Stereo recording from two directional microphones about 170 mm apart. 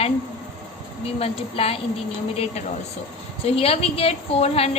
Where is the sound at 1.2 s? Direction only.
35° left (ahead or behind).